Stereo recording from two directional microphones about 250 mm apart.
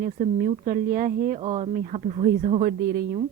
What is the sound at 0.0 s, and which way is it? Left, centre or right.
A woman's voice, right.